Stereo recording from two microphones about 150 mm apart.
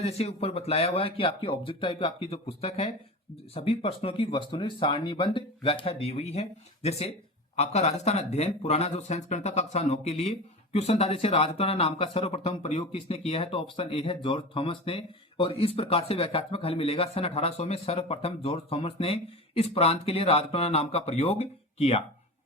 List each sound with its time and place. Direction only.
0.0 s speech: 45° left (ahead or behind)